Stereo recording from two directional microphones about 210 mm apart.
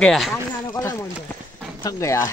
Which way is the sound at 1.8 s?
15° left (ahead or behind).